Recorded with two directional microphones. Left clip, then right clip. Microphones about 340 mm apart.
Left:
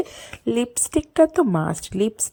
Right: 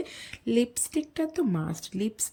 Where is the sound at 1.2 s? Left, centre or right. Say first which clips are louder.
Left 10 dB; left.